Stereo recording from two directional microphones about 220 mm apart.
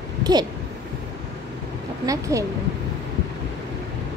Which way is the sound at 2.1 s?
15° right (ahead or behind).